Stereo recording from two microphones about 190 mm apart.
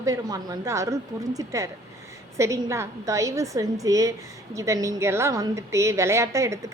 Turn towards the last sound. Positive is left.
turn(degrees=-15)  # may be behind; listen again after turning